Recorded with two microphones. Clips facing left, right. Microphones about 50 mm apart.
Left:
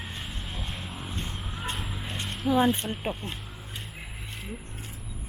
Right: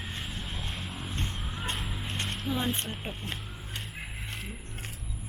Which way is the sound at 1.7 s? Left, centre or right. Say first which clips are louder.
Even; centre.